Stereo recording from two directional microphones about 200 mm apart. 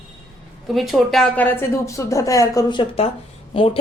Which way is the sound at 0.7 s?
Centre (ahead or behind).